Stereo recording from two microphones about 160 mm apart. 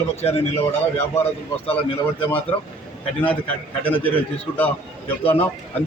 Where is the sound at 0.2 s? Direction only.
40° left (ahead or behind).